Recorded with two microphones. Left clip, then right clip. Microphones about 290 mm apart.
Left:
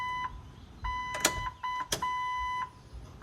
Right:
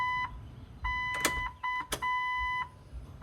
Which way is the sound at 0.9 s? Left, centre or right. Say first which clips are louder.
Even; right.